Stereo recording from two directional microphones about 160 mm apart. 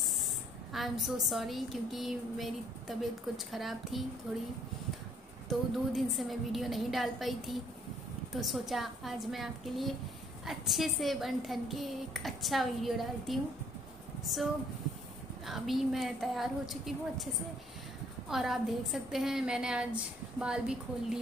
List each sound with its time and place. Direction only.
0.7 s a woman's voice: centre (ahead or behind)
5.5 s a woman's voice: centre (ahead or behind)
15.4 s a woman's voice: centre (ahead or behind)
18.3 s a woman's voice: centre (ahead or behind)